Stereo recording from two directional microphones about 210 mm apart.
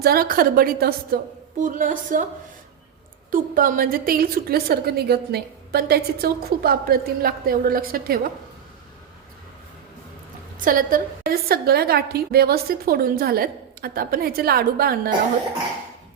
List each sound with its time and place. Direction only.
0.0 s a woman's voice: 45° right (ahead or behind)
3.3 s a woman's voice: 40° right (ahead or behind)
10.6 s a woman's voice: 40° right (ahead or behind)